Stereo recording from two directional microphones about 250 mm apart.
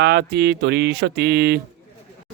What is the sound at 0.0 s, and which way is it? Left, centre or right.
A man's voice, right.